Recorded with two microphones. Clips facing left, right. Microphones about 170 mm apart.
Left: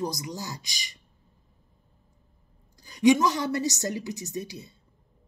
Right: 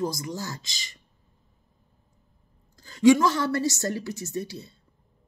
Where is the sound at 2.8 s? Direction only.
15° left (ahead or behind).